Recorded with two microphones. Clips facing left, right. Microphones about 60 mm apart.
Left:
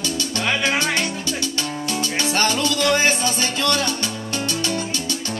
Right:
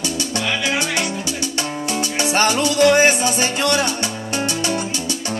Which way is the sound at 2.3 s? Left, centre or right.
Centre.